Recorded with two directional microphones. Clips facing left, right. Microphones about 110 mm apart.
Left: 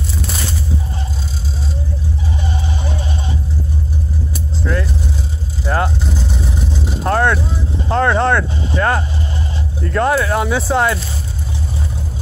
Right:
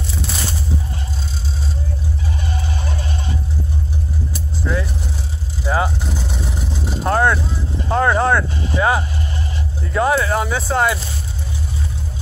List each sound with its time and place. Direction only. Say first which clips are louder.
4.6 s vehicle: left 2 dB; 5° right (ahead or behind)
7.0 s vehicle: left 1 dB; 5° right (ahead or behind)
7.9 s speech: left 1 dB; 5° right (ahead or behind)